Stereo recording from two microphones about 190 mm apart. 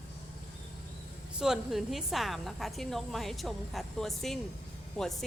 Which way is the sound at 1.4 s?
Centre (ahead or behind).